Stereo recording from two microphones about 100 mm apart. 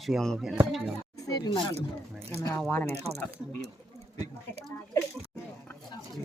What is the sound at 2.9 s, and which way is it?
Speech, 90° right.